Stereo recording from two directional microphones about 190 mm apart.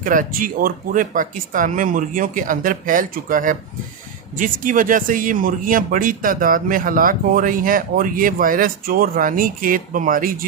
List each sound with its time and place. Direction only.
0.0 s speech: 45° right (ahead or behind)